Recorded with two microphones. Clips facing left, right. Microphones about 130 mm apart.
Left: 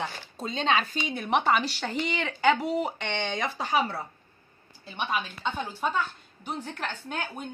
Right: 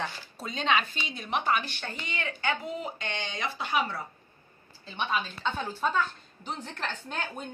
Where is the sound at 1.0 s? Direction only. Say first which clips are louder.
Left 5 dB; 60° left (ahead or behind); by 4.0 s 35° left (ahead or behind).